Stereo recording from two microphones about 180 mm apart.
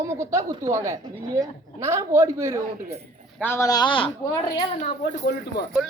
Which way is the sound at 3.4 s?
15° left (ahead or behind).